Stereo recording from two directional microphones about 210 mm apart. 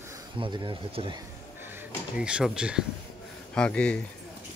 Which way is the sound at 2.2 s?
5° right (ahead or behind).